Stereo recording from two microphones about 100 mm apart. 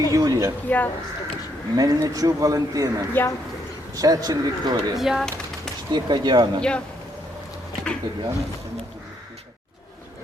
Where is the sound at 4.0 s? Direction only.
40° right (ahead or behind).